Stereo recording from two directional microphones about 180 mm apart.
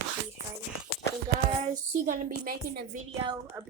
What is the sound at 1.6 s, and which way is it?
A woman's voice, 50° right (ahead or behind).